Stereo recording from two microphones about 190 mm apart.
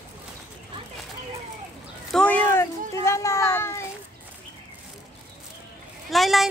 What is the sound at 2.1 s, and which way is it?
A child's voice, 5° left (ahead or behind).